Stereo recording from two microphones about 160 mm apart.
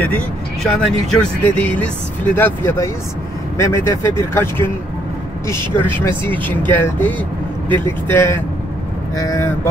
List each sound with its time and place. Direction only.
0.7 s speech: 5° left (ahead or behind)
5.8 s speech: 15° left (ahead or behind)